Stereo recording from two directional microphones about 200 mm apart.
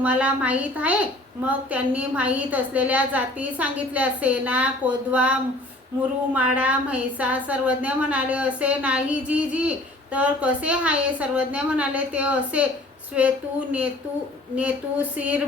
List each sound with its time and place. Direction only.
0.0 s a woman's voice: 5° right (ahead or behind)
14.5 s a woman's voice: 5° right (ahead or behind)